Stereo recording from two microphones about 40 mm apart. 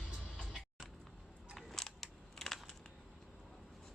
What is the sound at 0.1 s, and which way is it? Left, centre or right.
Music, right.